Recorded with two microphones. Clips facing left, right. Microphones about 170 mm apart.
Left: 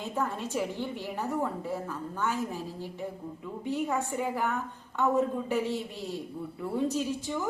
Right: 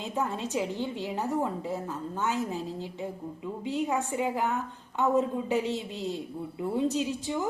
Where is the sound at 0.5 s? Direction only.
15° right (ahead or behind).